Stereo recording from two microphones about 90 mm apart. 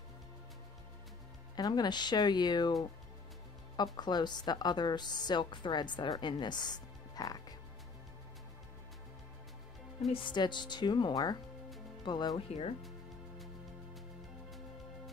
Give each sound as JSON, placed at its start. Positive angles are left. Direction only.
{"t": 1.6, "sound": "a woman's voice", "side_deg": 55}
{"t": 3.7, "sound": "a woman's voice", "side_deg": 50}
{"t": 10.1, "sound": "speech", "side_deg": 60}